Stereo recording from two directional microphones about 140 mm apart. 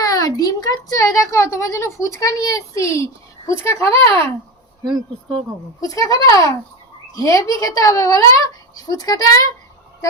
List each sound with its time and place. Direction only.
0.0 s a woman's voice: 25° left (ahead or behind)
5.8 s a woman's voice: 25° left (ahead or behind)